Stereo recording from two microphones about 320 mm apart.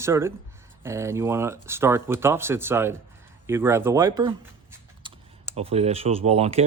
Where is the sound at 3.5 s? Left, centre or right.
Centre.